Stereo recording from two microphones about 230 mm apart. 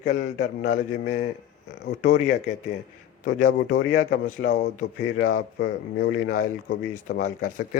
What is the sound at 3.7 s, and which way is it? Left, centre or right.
Speech, left.